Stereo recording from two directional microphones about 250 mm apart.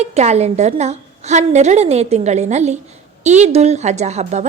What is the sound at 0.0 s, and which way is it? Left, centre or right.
A woman's voice, right.